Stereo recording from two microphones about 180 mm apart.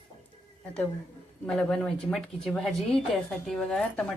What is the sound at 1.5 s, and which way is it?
Speech, 5° left (ahead or behind).